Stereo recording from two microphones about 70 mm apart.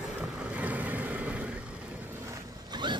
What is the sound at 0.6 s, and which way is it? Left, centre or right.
Vehicle, right.